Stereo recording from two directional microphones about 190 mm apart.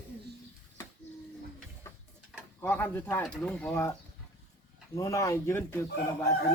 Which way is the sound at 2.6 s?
10° left (ahead or behind).